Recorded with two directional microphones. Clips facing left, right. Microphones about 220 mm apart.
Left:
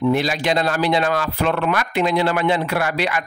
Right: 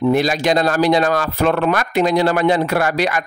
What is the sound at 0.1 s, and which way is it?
A man's voice, 45° right (ahead or behind).